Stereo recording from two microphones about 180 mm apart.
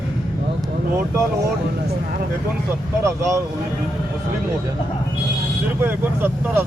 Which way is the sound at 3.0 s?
15° right (ahead or behind).